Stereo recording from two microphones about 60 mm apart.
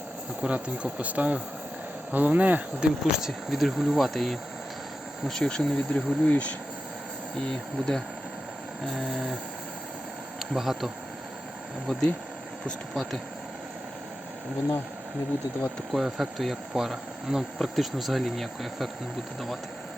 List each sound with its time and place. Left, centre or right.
0.4 s speech: centre
3.1 s insect: centre
5.3 s speech: centre
10.5 s insect: centre
11.9 s speech: centre
12.9 s insect: centre
15.9 s insect: centre